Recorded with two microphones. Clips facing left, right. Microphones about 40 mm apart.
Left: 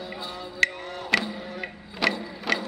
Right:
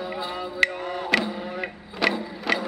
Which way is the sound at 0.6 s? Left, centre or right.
Centre.